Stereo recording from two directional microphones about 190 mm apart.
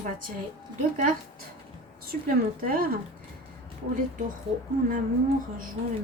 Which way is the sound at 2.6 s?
50° right (ahead or behind).